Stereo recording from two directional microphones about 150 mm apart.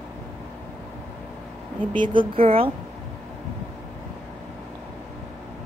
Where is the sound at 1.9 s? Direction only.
35° right (ahead or behind).